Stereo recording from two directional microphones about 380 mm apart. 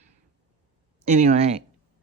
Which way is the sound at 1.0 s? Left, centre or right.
Centre.